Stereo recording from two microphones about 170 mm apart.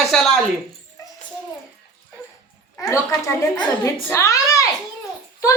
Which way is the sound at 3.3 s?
20° left (ahead or behind).